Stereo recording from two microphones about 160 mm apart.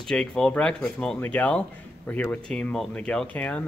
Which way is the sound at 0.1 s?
5° left (ahead or behind).